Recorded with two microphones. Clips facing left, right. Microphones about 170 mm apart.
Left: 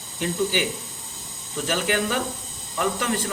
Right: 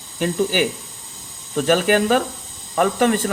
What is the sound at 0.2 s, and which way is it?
Speech, 60° right (ahead or behind).